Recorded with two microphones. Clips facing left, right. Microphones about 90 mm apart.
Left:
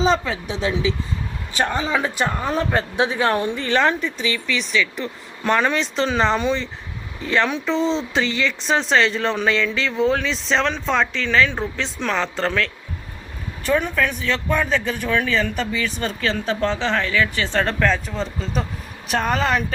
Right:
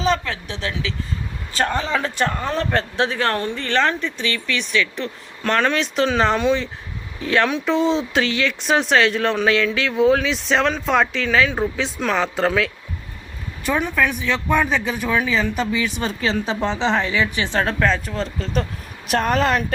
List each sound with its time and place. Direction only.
0.0 s speech: 20° left (ahead or behind); by 19.6 s centre (ahead or behind)